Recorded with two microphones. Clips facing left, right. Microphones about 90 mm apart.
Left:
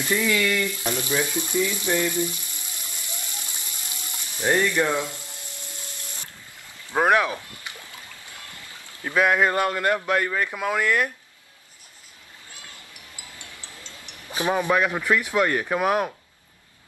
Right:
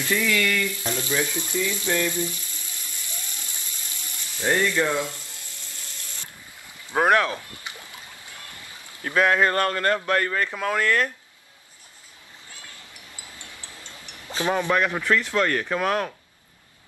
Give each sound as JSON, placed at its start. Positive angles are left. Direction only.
{"t": 0.0, "sound": "frying", "side_deg": 20}
{"t": 6.9, "sound": "speech", "side_deg": 0}
{"t": 7.5, "sound": "a sound", "side_deg": -20}
{"t": 9.0, "sound": "speech", "side_deg": 5}
{"t": 13.4, "sound": "music", "side_deg": 20}
{"t": 14.3, "sound": "speech", "side_deg": 15}